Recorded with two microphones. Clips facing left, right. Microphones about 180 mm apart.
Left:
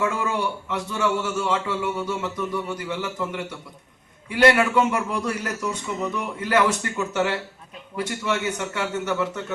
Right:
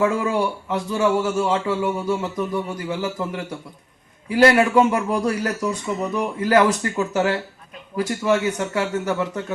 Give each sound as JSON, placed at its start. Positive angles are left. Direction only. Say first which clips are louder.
{"t": 0.0, "sound": "a man's voice", "louder": "right 5 dB", "side_deg": -30}